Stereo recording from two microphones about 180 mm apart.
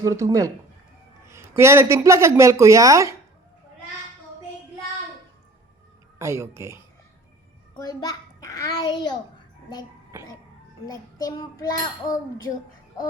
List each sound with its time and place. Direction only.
0.0 s speech: 15° right (ahead or behind)
6.1 s speech: 15° right (ahead or behind)
7.8 s a child's voice: 20° left (ahead or behind)
10.8 s a child's voice: 20° left (ahead or behind)